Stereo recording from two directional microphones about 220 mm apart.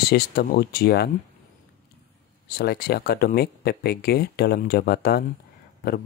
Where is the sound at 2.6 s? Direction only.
45° left (ahead or behind).